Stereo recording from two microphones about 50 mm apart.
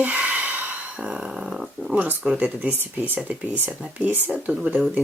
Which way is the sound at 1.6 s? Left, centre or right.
Centre.